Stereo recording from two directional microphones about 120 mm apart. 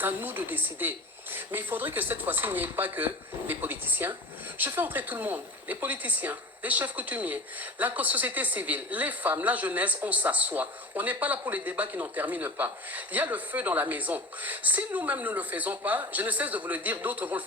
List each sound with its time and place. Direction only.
0.0 s speech: 15° right (ahead or behind)